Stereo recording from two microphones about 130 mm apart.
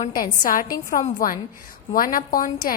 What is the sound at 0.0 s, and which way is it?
A woman's voice, 90° left.